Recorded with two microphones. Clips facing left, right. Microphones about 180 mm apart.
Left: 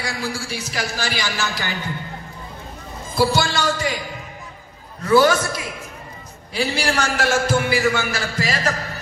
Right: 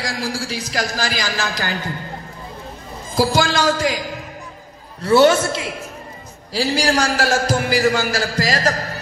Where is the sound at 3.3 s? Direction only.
90° right.